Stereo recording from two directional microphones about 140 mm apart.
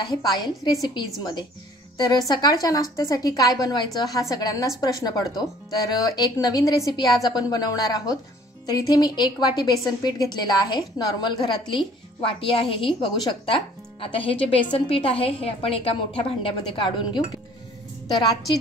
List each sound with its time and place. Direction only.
0.0 s a woman's voice: 30° left (ahead or behind)